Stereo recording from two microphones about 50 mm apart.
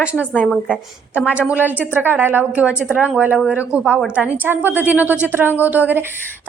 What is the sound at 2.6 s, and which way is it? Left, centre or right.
A woman's voice, right.